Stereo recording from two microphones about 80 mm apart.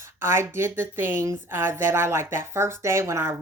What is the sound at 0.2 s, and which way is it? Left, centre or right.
Speech, right.